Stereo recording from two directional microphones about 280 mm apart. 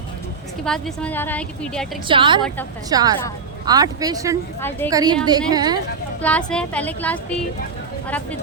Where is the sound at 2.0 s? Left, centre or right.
Centre.